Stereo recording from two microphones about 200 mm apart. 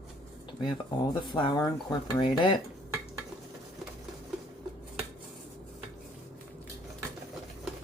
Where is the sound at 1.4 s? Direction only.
20° left (ahead or behind).